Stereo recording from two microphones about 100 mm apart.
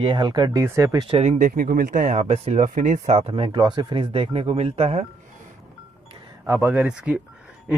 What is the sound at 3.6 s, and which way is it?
Speech, 50° right (ahead or behind).